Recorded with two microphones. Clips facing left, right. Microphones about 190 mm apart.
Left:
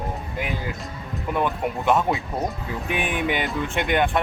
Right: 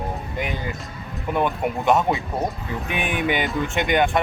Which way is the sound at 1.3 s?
Centre (ahead or behind).